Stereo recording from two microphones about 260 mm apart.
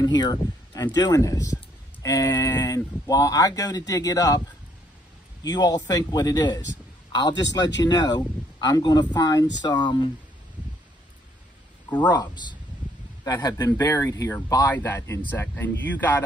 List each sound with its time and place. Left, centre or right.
0.0 s speech: centre
5.4 s a man's voice: centre
11.9 s speech: centre